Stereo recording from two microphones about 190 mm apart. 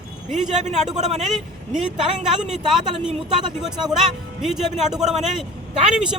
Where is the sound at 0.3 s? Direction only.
40° right (ahead or behind).